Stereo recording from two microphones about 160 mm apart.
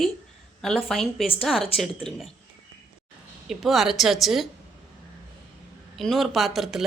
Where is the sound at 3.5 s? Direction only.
Centre (ahead or behind).